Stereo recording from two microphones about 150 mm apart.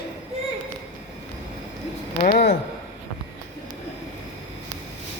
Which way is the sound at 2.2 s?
65° left (ahead or behind).